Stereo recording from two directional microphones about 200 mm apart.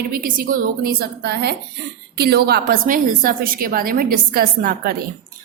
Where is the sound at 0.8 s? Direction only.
50° right (ahead or behind).